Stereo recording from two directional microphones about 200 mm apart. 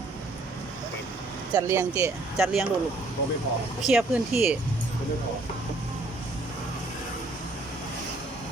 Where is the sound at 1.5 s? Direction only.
15° right (ahead or behind).